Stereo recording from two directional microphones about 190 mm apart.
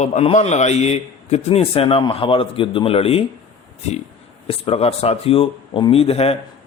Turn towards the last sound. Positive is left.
turn(degrees=30)  # may be behind; listen again after turning